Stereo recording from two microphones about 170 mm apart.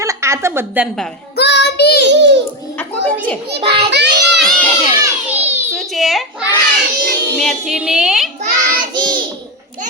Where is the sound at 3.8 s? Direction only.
85° right.